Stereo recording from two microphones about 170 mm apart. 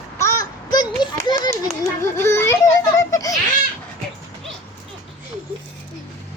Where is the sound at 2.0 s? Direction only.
15° left (ahead or behind).